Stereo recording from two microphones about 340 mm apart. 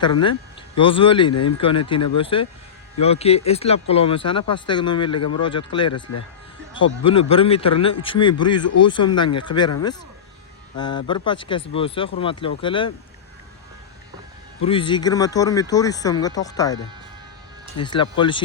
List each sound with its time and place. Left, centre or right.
0.0 s speech: centre
1.3 s speech: left
2.1 s speech: centre
7.1 s speech: centre
10.8 s speech: centre
14.6 s speech: centre
17.8 s speech: centre